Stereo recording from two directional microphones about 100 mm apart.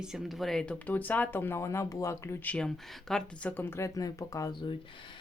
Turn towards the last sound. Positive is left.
turn(degrees=35)  # may be behind; listen again after turning